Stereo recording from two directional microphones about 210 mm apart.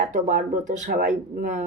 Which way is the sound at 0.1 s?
35° right (ahead or behind).